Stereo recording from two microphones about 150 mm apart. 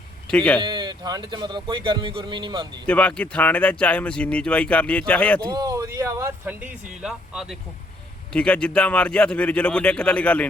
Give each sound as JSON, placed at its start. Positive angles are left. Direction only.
{"t": 0.3, "sound": "speech", "side_deg": 5}
{"t": 0.6, "sound": "speech", "side_deg": -30}
{"t": 2.8, "sound": "speech", "side_deg": 10}
{"t": 5.5, "sound": "speech", "side_deg": -25}